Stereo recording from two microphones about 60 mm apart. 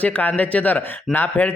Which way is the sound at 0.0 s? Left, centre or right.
Left.